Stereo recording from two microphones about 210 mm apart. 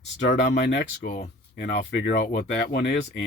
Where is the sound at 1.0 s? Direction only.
35° left (ahead or behind).